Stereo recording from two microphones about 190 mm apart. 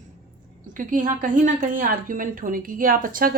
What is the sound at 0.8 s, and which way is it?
A woman's voice, 45° right (ahead or behind).